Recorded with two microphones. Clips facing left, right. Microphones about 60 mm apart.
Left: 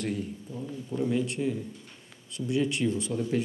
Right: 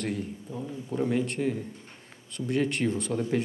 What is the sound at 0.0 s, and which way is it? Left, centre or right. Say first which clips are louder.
Speech: even; right.